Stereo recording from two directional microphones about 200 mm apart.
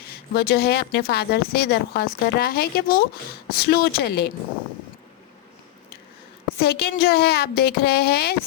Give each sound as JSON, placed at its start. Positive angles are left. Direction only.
{"t": 0.3, "sound": "speech", "side_deg": 50}
{"t": 6.6, "sound": "speech", "side_deg": 50}